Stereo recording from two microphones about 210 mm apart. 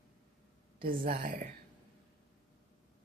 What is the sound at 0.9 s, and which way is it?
Speech, 45° right (ahead or behind).